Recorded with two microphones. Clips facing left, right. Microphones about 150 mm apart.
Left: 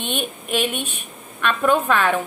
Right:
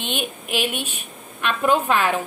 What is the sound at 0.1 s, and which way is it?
A woman's voice, 5° right (ahead or behind).